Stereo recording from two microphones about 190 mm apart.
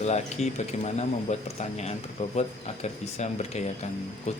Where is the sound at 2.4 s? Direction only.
35° left (ahead or behind).